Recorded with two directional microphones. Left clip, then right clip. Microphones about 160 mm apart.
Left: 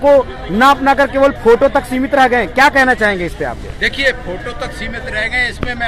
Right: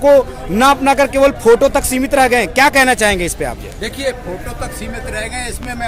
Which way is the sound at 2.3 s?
45° right (ahead or behind).